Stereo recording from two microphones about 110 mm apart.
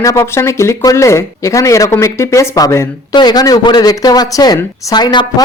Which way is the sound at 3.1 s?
40° left (ahead or behind).